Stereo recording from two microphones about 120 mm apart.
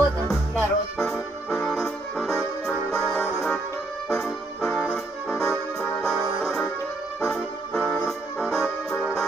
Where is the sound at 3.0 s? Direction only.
20° left (ahead or behind).